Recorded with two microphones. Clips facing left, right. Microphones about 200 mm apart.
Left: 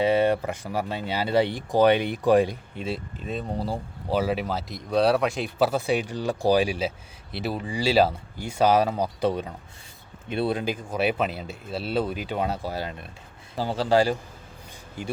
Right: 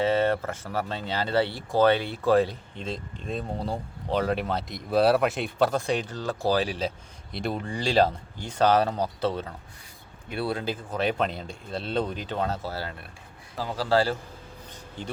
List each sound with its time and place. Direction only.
0.0 s speech: 15° left (ahead or behind)
13.6 s a man's voice: 30° left (ahead or behind)
13.9 s speech: 15° left (ahead or behind)